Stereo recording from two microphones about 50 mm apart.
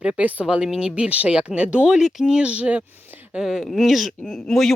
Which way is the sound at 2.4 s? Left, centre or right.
Right.